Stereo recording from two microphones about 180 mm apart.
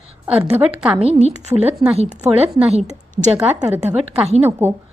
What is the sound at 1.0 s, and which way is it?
A woman's voice, 35° right (ahead or behind).